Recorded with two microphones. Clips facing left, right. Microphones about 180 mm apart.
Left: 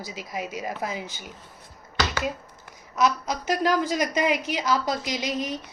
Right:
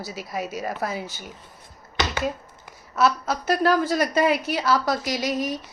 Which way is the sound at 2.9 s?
15° left (ahead or behind).